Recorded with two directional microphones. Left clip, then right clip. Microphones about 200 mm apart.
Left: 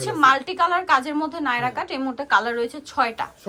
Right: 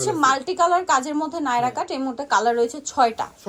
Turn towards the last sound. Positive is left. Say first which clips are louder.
# right 3 dB
turn(degrees=-20)  # may be behind; listen again after turning